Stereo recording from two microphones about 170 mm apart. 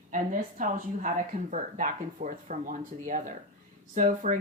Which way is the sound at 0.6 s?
50° right (ahead or behind).